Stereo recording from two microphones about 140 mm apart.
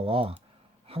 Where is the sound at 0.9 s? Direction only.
45° right (ahead or behind).